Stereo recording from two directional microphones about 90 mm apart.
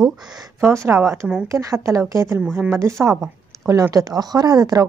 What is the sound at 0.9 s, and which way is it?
A woman's voice, 30° right (ahead or behind).